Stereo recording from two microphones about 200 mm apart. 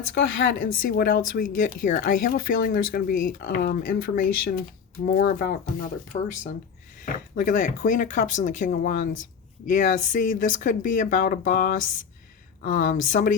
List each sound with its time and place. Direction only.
0.1 s speech: 55° left (ahead or behind)
7.0 s speech: 40° left (ahead or behind)